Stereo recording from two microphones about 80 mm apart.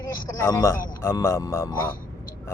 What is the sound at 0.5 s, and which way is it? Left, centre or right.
Speech, left.